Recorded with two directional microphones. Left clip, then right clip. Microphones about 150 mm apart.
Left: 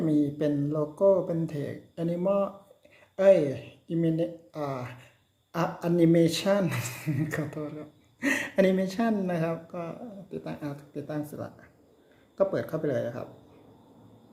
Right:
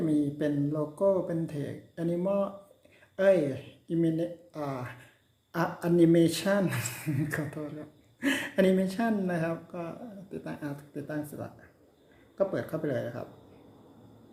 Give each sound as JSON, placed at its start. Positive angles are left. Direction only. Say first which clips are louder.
{"t": 0.1, "sound": "speech", "louder": "left 2 dB", "side_deg": 20}